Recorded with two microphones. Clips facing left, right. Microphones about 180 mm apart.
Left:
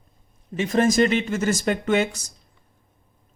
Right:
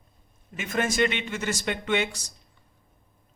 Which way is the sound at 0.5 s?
35° left (ahead or behind).